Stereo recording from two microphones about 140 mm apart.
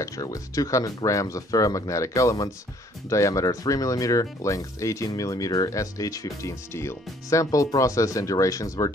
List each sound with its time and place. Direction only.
0.0 s speech: 25° left (ahead or behind)